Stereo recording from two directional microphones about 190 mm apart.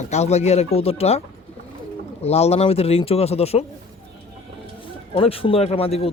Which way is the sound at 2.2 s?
35° left (ahead or behind).